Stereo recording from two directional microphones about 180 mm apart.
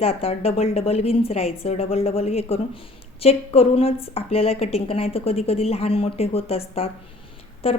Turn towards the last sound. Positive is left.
turn(degrees=35)  # may be behind; listen again after turning